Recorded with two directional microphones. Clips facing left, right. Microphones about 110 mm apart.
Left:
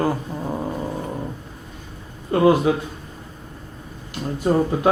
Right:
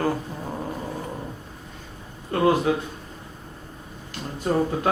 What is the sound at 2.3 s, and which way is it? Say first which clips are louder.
Speech: left 5 dB; 15° left (ahead or behind).